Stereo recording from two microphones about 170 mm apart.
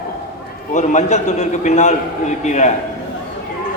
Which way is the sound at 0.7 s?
45° left (ahead or behind).